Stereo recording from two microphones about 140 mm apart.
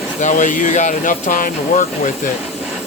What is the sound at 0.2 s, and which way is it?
Speech, 65° left (ahead or behind).